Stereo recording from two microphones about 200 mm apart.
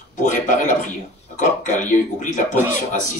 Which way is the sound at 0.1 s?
40° left (ahead or behind).